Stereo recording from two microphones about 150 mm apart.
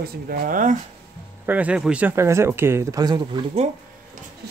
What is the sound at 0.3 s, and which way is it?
Speech, 65° right (ahead or behind).